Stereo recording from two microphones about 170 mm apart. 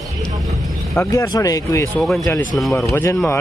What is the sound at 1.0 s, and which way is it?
Speech, 20° left (ahead or behind).